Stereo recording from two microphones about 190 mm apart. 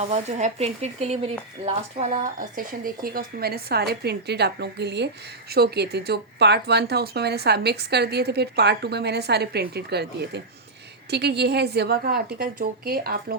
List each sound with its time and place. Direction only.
0.0 s speech: 35° right (ahead or behind); by 13.3 s 50° right (ahead or behind)